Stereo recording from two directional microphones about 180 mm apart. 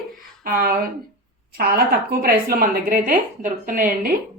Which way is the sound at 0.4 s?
50° right (ahead or behind).